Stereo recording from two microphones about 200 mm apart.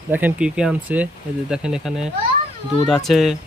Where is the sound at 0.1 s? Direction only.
10° right (ahead or behind).